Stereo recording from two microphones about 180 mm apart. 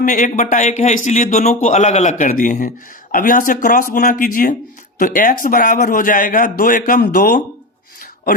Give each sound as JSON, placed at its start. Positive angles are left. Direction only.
{"t": 0.0, "sound": "a man's voice", "side_deg": 45}